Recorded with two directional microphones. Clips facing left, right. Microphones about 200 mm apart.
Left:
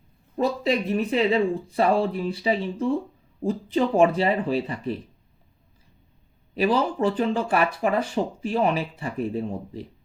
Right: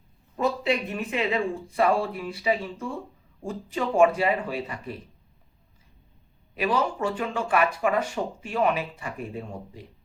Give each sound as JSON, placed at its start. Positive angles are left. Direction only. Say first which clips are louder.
{"t": 0.3, "sound": "speech", "louder": "left 2 dB", "side_deg": 35}
{"t": 6.6, "sound": "speech", "louder": "left 4 dB", "side_deg": 35}